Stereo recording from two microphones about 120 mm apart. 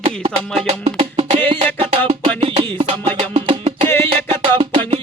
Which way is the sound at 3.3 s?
65° right (ahead or behind).